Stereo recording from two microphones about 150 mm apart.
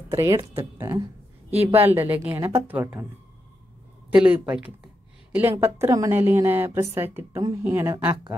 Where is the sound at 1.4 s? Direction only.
15° right (ahead or behind).